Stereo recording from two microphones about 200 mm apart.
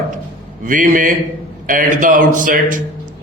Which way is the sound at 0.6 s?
40° right (ahead or behind).